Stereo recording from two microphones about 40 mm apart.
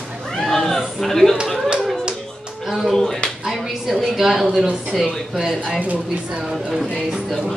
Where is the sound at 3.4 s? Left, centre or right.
Centre.